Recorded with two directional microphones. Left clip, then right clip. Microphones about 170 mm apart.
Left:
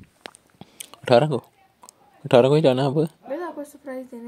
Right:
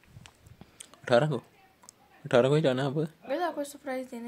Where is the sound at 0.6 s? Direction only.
35° left (ahead or behind).